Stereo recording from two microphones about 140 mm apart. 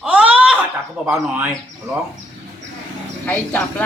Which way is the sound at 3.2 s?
10° left (ahead or behind).